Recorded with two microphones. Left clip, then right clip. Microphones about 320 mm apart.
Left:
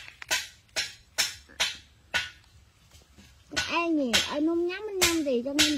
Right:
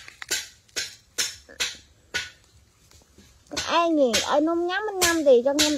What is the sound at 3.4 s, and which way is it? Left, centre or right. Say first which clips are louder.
Speech: right 5 dB; centre.